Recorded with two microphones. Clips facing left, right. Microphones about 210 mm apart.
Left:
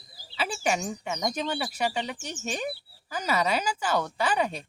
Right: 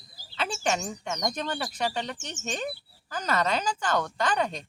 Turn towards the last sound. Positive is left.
turn(degrees=10)  # may be behind; listen again after turning